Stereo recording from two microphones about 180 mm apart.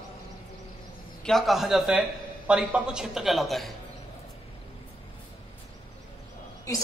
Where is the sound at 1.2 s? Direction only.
Centre (ahead or behind).